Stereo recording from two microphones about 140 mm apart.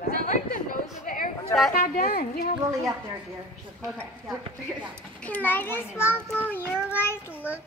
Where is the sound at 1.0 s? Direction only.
85° left.